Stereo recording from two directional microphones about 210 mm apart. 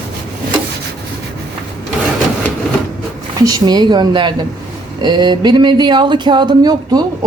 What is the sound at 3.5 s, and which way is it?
Speech, 20° right (ahead or behind).